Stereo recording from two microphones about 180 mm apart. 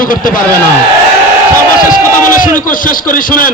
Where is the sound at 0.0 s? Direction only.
50° left (ahead or behind).